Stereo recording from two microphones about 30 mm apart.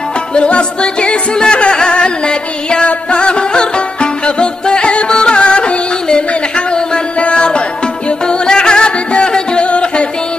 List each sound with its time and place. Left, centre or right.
0.3 s music: left